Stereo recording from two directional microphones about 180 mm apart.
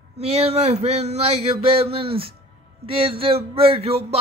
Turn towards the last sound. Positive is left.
turn(degrees=-35)  # may be behind; listen again after turning